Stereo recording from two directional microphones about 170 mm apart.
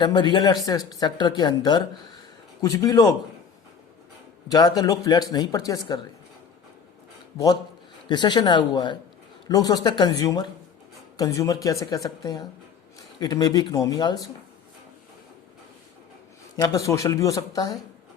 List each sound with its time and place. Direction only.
0.0 s speech: 25° left (ahead or behind)
4.4 s speech: 20° left (ahead or behind)
7.3 s speech: 20° left (ahead or behind)
16.6 s speech: 20° left (ahead or behind)